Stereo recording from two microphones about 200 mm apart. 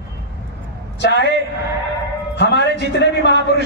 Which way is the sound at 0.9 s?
60° left (ahead or behind).